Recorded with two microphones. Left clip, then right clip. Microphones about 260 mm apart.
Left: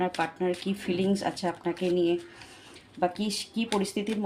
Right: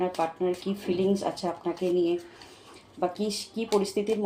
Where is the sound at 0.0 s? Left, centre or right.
Left.